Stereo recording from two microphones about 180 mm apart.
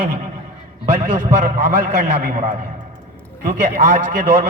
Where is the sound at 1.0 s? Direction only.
50° right (ahead or behind).